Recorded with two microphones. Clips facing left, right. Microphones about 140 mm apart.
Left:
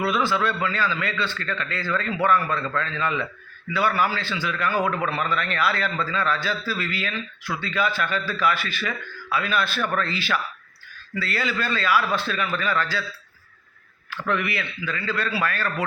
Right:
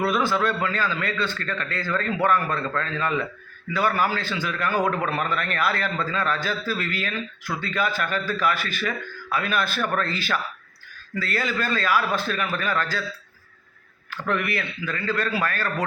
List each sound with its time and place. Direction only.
0.0 s a man's voice: 45° right (ahead or behind)
14.1 s a man's voice: 45° right (ahead or behind)